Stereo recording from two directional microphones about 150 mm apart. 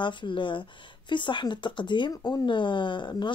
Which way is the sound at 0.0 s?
35° left (ahead or behind).